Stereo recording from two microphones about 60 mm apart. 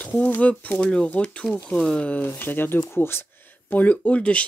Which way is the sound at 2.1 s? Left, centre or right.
Left.